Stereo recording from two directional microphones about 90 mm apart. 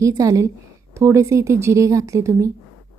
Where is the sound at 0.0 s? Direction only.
35° right (ahead or behind).